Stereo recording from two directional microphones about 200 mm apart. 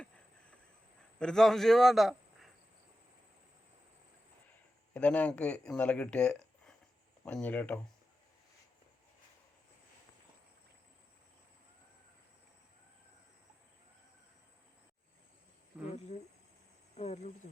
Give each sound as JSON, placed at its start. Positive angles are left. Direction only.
{"t": 1.2, "sound": "a man's voice", "side_deg": 5}
{"t": 4.9, "sound": "speech", "side_deg": 5}
{"t": 17.0, "sound": "speech", "side_deg": 30}